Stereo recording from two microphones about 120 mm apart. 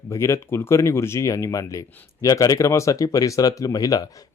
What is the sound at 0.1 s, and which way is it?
Speech, 25° left (ahead or behind).